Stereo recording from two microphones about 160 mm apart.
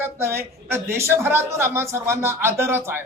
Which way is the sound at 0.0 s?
15° right (ahead or behind).